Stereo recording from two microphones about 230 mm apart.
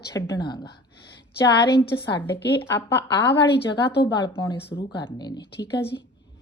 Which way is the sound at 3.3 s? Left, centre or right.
Left.